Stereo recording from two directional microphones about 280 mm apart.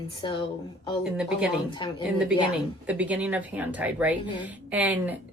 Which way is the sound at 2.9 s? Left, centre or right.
Centre.